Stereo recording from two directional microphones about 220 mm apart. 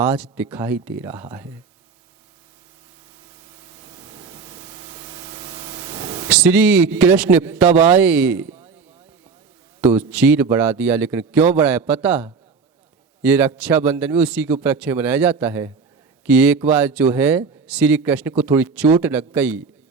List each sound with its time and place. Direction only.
0.0 s speech: 10° right (ahead or behind)
3.8 s spray: 20° right (ahead or behind)
6.2 s speech: 5° right (ahead or behind)
9.9 s speech: 5° right (ahead or behind)